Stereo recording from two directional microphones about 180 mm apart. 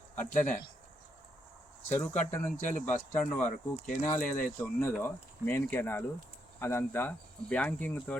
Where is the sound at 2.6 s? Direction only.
45° left (ahead or behind).